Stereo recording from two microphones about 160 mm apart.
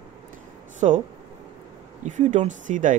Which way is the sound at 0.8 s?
40° right (ahead or behind).